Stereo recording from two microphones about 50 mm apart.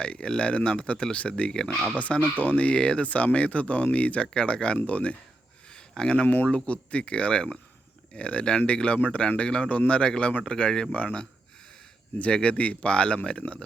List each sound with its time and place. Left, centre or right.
0.0 s speech: left
5.6 s a sound: centre
6.4 s speech: left